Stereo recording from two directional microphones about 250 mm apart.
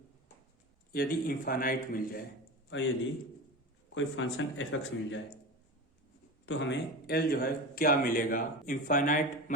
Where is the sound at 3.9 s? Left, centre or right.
Left.